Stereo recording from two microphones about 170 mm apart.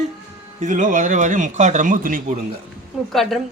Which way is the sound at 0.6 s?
50° right (ahead or behind).